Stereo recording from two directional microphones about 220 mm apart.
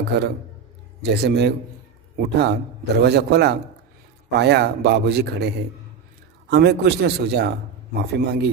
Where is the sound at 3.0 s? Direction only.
50° right (ahead or behind).